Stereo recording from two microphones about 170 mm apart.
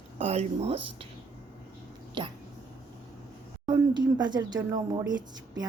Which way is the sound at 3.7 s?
25° right (ahead or behind).